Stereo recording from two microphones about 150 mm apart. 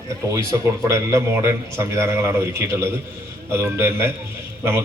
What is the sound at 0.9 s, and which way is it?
A man's voice, 20° right (ahead or behind).